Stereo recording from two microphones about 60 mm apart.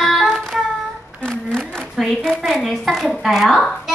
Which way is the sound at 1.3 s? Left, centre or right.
Centre.